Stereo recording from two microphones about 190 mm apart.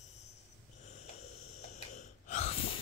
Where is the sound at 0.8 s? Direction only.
35° left (ahead or behind).